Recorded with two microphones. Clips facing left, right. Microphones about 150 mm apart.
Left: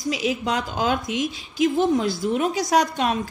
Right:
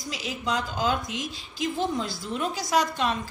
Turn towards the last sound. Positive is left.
turn(degrees=65)  # may be behind; listen again after turning